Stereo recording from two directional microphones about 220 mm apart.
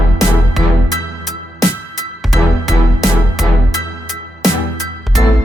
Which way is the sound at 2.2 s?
Centre (ahead or behind).